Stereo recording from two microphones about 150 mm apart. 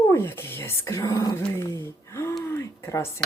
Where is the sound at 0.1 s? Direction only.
15° left (ahead or behind).